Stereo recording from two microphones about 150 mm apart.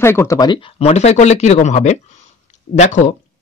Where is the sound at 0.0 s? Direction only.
15° left (ahead or behind).